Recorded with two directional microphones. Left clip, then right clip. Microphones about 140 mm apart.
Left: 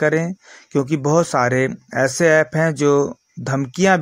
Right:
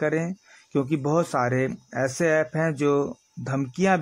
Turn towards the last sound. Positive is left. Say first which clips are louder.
# left 7 dB
turn(degrees=15)  # may be behind; listen again after turning